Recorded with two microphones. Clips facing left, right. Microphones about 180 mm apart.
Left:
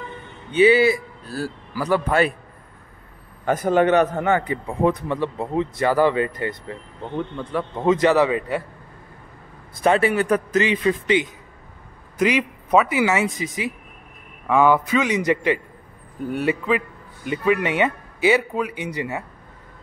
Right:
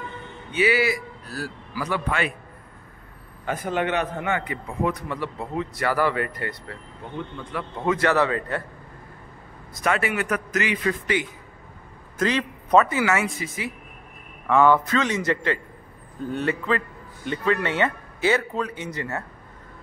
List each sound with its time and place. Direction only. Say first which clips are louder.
0.5 s a man's voice: left 7 dB; 25° left (ahead or behind)
3.4 s a man's voice: left 8 dB; 40° left (ahead or behind); by 8.6 s 15° left (ahead or behind)
9.8 s a man's voice: left 6 dB; 30° left (ahead or behind); by 19.2 s 15° left (ahead or behind)